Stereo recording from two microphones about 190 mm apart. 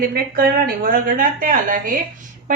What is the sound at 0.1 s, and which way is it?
A woman's voice, 50° right (ahead or behind).